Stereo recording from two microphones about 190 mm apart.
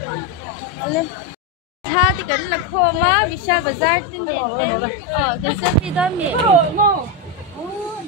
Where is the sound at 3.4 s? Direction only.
25° left (ahead or behind).